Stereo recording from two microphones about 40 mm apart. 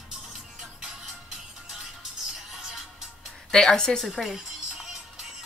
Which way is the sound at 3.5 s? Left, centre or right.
Centre.